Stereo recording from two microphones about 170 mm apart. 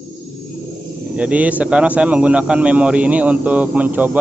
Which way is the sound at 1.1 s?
5° right (ahead or behind).